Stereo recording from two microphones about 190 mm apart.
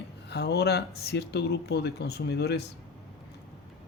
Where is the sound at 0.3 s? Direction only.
60° left (ahead or behind).